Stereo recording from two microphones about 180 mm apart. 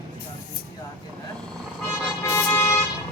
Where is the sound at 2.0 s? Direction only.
15° left (ahead or behind).